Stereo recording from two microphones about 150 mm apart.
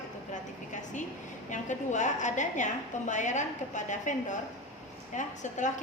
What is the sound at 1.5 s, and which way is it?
A woman's voice, 55° left (ahead or behind).